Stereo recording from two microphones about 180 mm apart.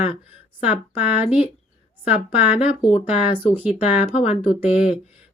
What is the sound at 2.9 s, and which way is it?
Speech, 35° left (ahead or behind).